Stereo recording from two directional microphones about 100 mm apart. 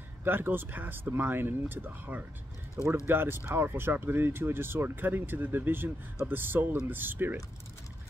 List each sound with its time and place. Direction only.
0.2 s speech: 20° right (ahead or behind)